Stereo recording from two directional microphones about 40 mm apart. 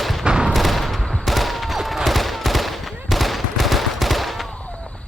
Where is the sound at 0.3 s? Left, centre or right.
Right.